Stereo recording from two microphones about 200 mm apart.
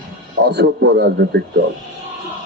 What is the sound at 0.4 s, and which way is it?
Speech, 55° right (ahead or behind).